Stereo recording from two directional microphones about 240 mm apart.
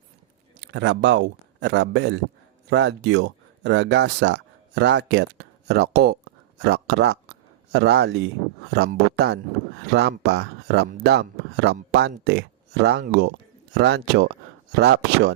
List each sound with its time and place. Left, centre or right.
0.7 s speech: right